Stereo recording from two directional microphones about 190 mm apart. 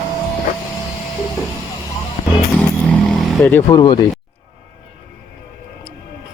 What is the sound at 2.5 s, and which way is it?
Vehicle, 5° left (ahead or behind).